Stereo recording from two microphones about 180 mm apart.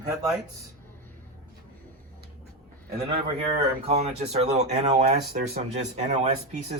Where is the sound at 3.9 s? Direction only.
35° right (ahead or behind).